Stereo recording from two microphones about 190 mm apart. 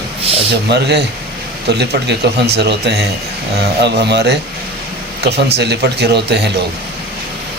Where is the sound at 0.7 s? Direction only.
60° right (ahead or behind).